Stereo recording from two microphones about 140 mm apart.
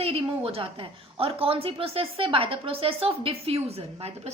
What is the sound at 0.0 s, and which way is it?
A woman's voice, 45° right (ahead or behind).